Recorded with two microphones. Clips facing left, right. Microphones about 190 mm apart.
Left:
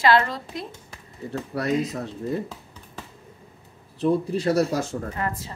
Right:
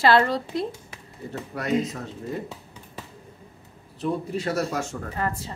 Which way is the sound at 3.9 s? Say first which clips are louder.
Left 5 dB; 35° left (ahead or behind).